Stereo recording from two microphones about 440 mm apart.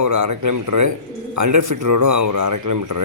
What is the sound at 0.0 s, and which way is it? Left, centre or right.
Speech, right.